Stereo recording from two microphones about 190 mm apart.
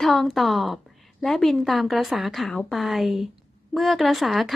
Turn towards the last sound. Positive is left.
turn(degrees=0)  # may be behind; listen again after turning